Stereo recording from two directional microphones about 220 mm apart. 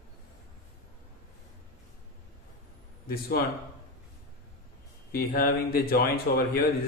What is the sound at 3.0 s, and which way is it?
Speech, 45° left (ahead or behind).